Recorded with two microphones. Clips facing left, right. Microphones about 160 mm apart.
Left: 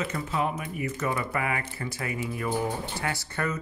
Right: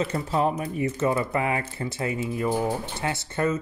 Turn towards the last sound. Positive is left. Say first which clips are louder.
# right 5 dB
turn(degrees=-25)  # may be behind; listen again after turning